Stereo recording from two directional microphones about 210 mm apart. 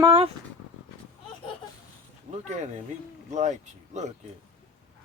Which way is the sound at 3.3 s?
35° right (ahead or behind).